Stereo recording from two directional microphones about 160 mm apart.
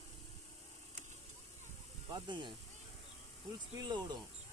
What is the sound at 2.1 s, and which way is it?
Speech, 30° right (ahead or behind).